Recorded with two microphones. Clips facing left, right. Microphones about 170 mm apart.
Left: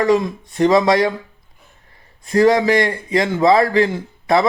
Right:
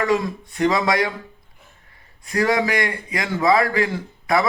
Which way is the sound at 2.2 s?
25° left (ahead or behind).